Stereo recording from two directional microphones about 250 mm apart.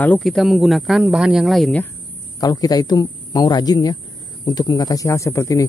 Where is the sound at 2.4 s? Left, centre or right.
Centre.